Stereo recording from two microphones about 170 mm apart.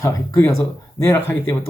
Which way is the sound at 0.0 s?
15° left (ahead or behind).